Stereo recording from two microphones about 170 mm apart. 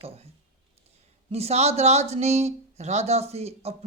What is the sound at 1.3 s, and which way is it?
Speech, 40° right (ahead or behind).